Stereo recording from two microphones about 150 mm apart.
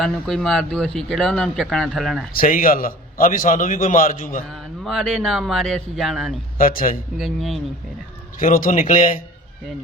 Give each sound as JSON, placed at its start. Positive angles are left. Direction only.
{"t": 0.0, "sound": "speech", "side_deg": 0}
{"t": 2.3, "sound": "a man's voice", "side_deg": 70}
{"t": 4.5, "sound": "speech", "side_deg": 0}
{"t": 6.6, "sound": "a man's voice", "side_deg": 70}
{"t": 7.2, "sound": "speech", "side_deg": 0}
{"t": 8.4, "sound": "speech", "side_deg": 65}